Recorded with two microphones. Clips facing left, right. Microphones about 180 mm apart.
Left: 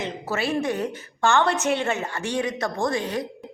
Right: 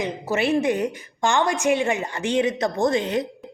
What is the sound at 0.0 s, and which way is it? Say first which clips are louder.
A woman's voice: right 4 dB; 15° right (ahead or behind).